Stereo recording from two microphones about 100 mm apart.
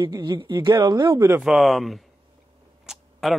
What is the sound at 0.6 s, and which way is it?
Speech, 35° right (ahead or behind).